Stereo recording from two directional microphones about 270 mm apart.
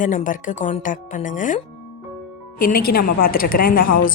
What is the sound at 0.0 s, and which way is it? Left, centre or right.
Speech, left.